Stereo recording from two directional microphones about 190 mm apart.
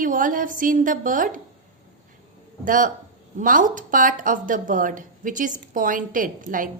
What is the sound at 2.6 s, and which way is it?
Speech, 45° right (ahead or behind).